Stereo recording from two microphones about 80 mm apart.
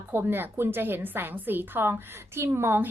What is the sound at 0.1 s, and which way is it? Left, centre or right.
A woman's voice, right.